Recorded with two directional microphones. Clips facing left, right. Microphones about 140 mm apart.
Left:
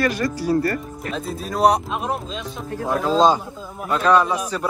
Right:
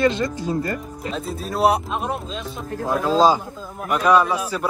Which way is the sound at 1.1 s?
Centre (ahead or behind).